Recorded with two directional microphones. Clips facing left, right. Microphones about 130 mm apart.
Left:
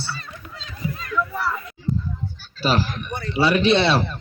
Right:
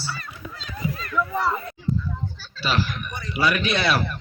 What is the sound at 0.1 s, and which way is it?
Children playing, 25° left (ahead or behind).